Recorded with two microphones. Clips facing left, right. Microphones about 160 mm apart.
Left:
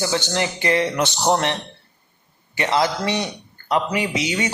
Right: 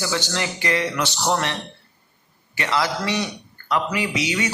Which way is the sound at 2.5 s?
20° left (ahead or behind).